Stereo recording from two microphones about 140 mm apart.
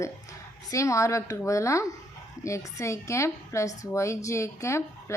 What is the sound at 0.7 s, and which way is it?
Speech, 20° left (ahead or behind).